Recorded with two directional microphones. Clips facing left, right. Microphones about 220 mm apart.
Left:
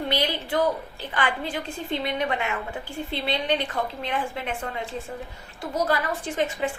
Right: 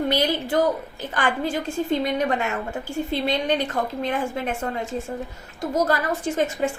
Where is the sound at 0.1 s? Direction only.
45° right (ahead or behind).